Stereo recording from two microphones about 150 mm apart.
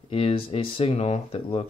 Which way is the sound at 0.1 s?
40° left (ahead or behind).